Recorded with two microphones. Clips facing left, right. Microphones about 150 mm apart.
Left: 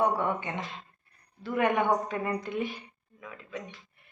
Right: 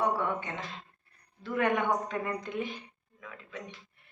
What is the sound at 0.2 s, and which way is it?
A woman's voice, 15° left (ahead or behind).